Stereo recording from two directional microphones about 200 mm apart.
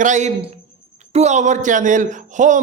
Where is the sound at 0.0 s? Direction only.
35° right (ahead or behind).